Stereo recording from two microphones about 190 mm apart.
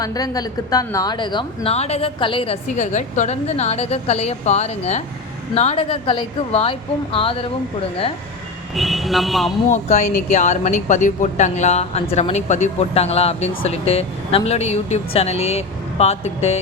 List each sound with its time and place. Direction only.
0.0 s a woman's voice: 20° left (ahead or behind)
8.7 s a man's voice: centre (ahead or behind)
9.6 s a woman's voice: 40° left (ahead or behind)